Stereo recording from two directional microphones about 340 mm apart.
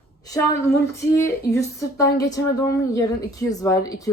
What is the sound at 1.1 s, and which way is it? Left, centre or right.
Speech, centre.